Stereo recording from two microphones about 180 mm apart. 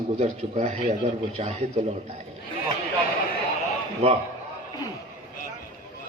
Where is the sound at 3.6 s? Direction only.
35° right (ahead or behind).